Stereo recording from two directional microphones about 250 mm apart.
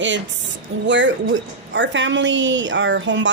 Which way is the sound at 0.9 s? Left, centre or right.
Right.